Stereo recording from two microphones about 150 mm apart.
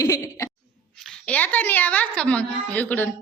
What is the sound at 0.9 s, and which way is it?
A woman's voice, 5° left (ahead or behind).